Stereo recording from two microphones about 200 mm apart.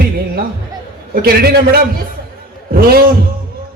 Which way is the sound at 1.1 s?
50° right (ahead or behind).